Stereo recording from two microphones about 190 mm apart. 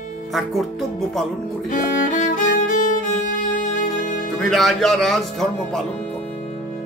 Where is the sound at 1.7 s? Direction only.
45° left (ahead or behind).